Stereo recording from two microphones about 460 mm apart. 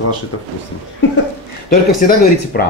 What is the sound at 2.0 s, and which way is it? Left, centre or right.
Speech, centre.